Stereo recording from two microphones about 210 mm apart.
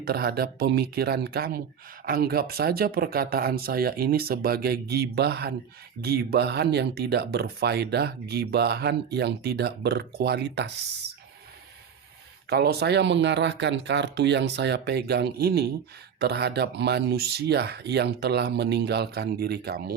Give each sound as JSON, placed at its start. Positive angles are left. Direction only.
{"t": 0.0, "sound": "speech", "side_deg": -50}
{"t": 12.5, "sound": "speech", "side_deg": -50}